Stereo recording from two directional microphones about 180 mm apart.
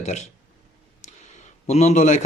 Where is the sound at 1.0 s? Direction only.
40° left (ahead or behind).